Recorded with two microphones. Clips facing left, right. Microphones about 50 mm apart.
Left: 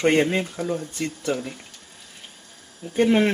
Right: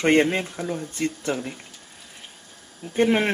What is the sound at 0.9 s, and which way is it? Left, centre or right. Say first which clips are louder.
Speech: right 1 dB; right.